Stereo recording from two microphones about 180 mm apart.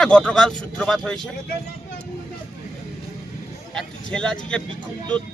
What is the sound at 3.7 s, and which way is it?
Speech, 5° left (ahead or behind).